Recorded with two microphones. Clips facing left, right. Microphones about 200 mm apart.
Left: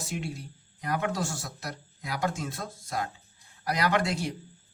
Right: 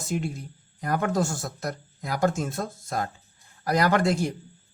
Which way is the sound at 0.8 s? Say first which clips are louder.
Right 5 dB; 45° right (ahead or behind).